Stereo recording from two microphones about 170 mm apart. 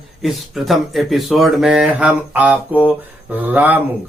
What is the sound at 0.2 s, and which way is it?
Speech, centre (ahead or behind).